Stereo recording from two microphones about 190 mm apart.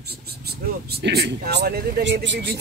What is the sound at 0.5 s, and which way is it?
Speech, 55° right (ahead or behind).